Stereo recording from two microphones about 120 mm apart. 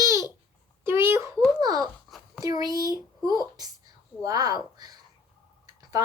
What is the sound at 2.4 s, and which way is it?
Speech, 30° right (ahead or behind).